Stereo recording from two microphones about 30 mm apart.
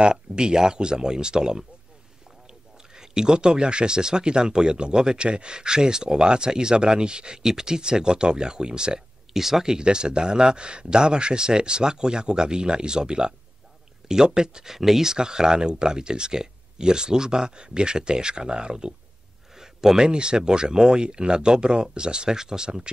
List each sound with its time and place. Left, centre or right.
0.0 s speech: right
9.3 s speech: centre
9.8 s speech: right
19.5 s a sound: centre
20.1 s speech: right